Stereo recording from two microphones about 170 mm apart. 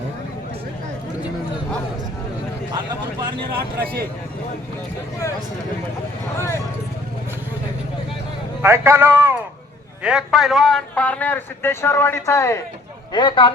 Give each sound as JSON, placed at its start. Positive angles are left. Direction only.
{"t": 2.7, "sound": "vehicle", "side_deg": -25}
{"t": 6.3, "sound": "a man's voice", "side_deg": 15}
{"t": 8.6, "sound": "a man's voice", "side_deg": -15}
{"t": 13.1, "sound": "speech", "side_deg": 30}